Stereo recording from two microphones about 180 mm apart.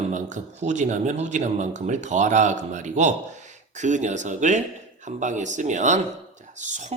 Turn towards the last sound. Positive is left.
turn(degrees=-40)  # may be behind; listen again after turning